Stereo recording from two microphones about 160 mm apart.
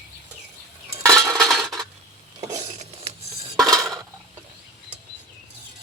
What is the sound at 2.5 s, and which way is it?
Cutlery, 45° right (ahead or behind).